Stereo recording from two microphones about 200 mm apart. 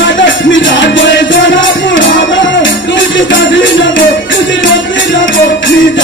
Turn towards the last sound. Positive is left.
turn(degrees=70)  # may be behind; listen again after turning